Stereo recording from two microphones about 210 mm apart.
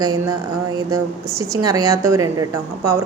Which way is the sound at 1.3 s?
15° right (ahead or behind).